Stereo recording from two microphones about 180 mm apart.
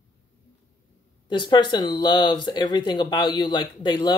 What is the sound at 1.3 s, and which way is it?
Speech, 25° left (ahead or behind).